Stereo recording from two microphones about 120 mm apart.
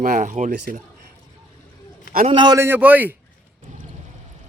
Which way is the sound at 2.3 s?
35° right (ahead or behind).